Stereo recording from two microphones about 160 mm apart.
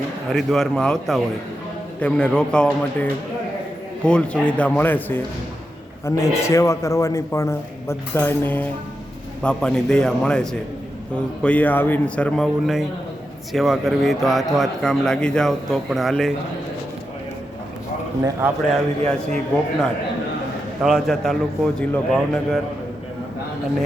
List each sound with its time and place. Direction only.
0.3 s a man's voice: centre (ahead or behind)
18.2 s speech: 15° right (ahead or behind)
18.7 s a man's voice: 5° left (ahead or behind)
20.8 s a man's voice: centre (ahead or behind)